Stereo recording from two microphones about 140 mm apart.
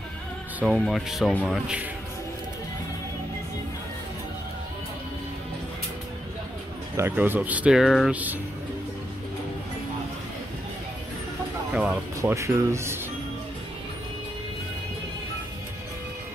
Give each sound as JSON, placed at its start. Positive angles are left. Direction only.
{"t": 0.7, "sound": "speech", "side_deg": 5}
{"t": 7.0, "sound": "speech", "side_deg": -15}
{"t": 8.1, "sound": "speech", "side_deg": -10}
{"t": 11.7, "sound": "speech", "side_deg": -10}
{"t": 12.2, "sound": "speech", "side_deg": -20}